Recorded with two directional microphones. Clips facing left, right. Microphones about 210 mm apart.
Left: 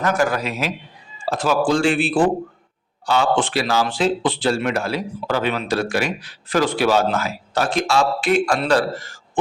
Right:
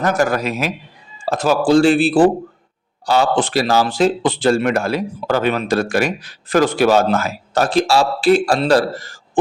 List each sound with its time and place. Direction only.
0.0 s speech: 40° right (ahead or behind)